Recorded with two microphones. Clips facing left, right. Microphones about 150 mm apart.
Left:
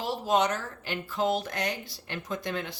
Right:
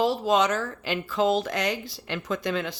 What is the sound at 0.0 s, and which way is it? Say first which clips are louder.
Speech: right 4 dB; 90° right.